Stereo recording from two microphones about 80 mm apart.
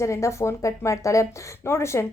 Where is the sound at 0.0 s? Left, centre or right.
Left.